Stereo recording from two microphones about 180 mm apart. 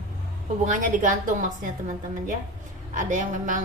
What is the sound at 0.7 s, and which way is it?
A woman's voice, 45° right (ahead or behind).